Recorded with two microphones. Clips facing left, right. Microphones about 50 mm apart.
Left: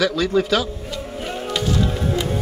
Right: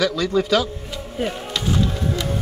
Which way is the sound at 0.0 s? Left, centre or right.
Centre.